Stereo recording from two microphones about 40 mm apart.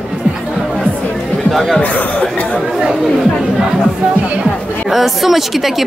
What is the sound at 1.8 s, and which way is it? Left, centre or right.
Speech, left.